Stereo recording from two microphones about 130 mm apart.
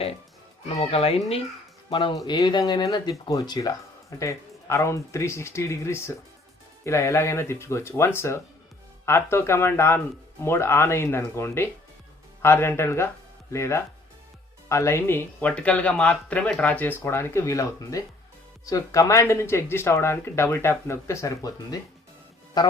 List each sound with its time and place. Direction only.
0.8 s speech: 50° left (ahead or behind)
1.9 s speech: 40° left (ahead or behind)